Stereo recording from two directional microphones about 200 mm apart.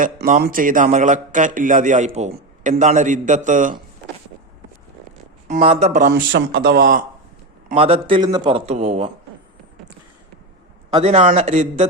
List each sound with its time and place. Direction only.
0.0 s speech: 40° right (ahead or behind)
5.5 s speech: 35° right (ahead or behind)
6.1 s speech: 55° right (ahead or behind)
7.7 s a man's voice: 30° right (ahead or behind)
10.9 s speech: 30° right (ahead or behind)